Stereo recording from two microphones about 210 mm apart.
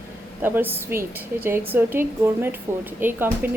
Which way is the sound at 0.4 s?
10° right (ahead or behind).